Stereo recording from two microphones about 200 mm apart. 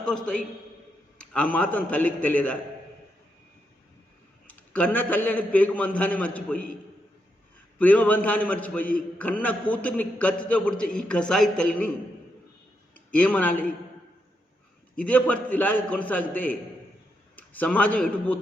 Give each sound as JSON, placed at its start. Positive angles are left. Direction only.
{"t": 0.0, "sound": "a man's voice", "side_deg": 0}
{"t": 4.4, "sound": "a man's voice", "side_deg": 10}
{"t": 7.8, "sound": "a man's voice", "side_deg": 10}
{"t": 13.1, "sound": "a man's voice", "side_deg": 5}
{"t": 14.9, "sound": "a man's voice", "side_deg": 5}